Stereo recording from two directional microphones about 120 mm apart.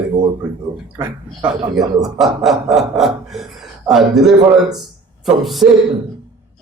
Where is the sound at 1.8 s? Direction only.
30° right (ahead or behind).